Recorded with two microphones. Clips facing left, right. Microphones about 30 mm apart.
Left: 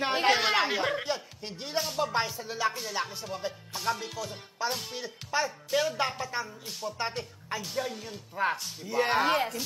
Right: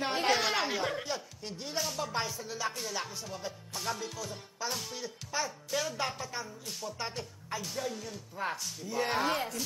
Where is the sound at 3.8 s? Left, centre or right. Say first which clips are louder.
Left 5 dB; centre.